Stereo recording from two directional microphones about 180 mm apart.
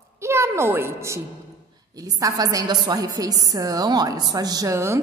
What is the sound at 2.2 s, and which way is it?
A woman's voice, 20° right (ahead or behind).